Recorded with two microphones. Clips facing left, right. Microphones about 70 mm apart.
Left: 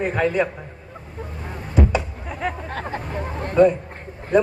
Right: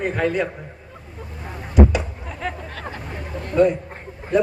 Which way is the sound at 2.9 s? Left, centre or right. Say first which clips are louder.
Left 4 dB; left.